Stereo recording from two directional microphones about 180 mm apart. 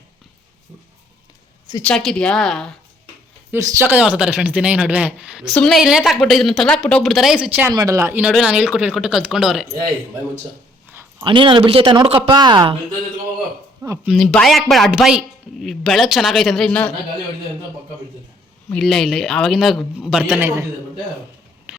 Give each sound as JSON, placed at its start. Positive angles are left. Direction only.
{"t": 1.8, "sound": "a woman's voice", "side_deg": 5}
{"t": 3.5, "sound": "a woman's voice", "side_deg": -15}
{"t": 7.7, "sound": "speech", "side_deg": -20}
{"t": 11.2, "sound": "speech", "side_deg": -25}
{"t": 13.8, "sound": "speech", "side_deg": -15}
{"t": 14.1, "sound": "a woman's voice", "side_deg": 0}
{"t": 18.7, "sound": "a woman's voice", "side_deg": 0}
{"t": 21.7, "sound": "clip-clop", "side_deg": -5}